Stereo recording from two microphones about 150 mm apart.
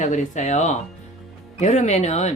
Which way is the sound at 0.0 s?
50° left (ahead or behind).